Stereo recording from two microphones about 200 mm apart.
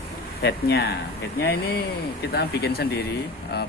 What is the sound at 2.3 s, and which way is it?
Speech, 55° left (ahead or behind).